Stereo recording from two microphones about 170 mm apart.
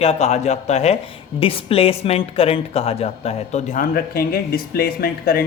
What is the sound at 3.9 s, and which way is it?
Speech, 60° left (ahead or behind).